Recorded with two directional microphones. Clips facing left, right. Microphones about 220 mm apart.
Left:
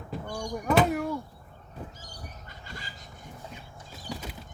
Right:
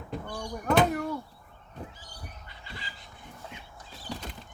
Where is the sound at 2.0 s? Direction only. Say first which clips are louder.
Left 2 dB; 45° left (ahead or behind).